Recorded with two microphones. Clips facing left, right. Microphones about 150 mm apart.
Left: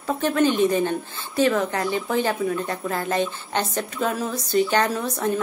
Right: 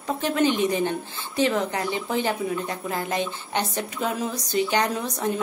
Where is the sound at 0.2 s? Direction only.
15° right (ahead or behind).